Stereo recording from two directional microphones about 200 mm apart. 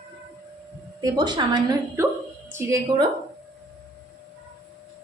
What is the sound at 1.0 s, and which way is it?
Speech, 20° right (ahead or behind).